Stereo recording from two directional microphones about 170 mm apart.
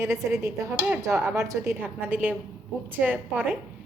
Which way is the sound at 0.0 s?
15° right (ahead or behind).